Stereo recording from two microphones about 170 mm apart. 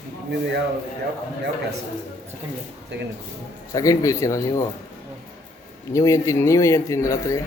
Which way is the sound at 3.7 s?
20° left (ahead or behind).